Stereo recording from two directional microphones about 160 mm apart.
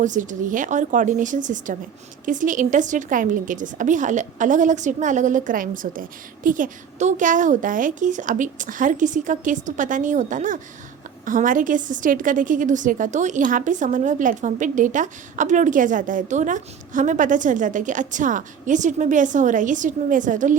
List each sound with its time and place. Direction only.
0.0 s a woman's voice: 50° right (ahead or behind)